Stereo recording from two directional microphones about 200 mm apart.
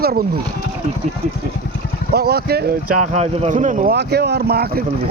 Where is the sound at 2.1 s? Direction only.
55° right (ahead or behind).